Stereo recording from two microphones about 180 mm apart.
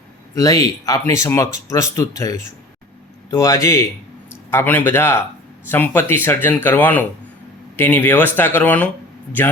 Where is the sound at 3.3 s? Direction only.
15° left (ahead or behind).